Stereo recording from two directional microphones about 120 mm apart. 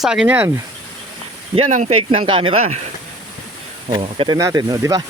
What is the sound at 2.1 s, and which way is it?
Speech, 45° right (ahead or behind).